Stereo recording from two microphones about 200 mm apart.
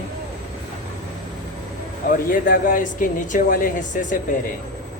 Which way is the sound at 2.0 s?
45° left (ahead or behind).